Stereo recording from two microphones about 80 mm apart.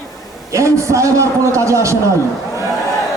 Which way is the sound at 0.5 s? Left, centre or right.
Right.